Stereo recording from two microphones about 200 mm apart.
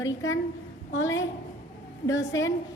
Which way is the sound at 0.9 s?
75° left (ahead or behind).